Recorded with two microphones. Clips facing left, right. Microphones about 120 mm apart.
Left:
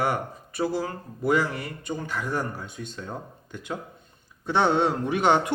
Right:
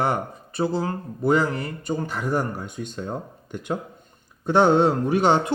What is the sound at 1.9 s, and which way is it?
Speech, 40° right (ahead or behind).